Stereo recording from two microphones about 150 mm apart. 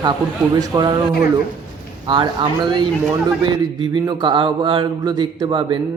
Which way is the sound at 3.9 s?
30° right (ahead or behind).